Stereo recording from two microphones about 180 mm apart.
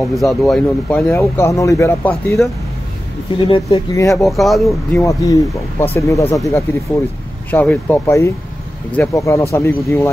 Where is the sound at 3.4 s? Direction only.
30° left (ahead or behind).